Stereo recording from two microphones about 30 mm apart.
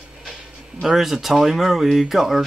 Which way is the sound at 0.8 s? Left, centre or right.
Centre.